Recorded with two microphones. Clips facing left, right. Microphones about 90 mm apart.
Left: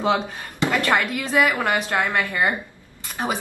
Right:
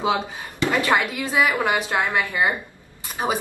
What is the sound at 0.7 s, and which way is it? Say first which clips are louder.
Speech: even; 15° right (ahead or behind).